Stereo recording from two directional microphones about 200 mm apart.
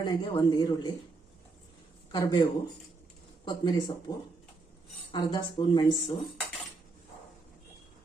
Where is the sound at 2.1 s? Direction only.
20° left (ahead or behind).